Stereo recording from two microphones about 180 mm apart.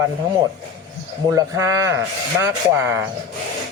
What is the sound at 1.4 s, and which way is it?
Speech, 15° right (ahead or behind).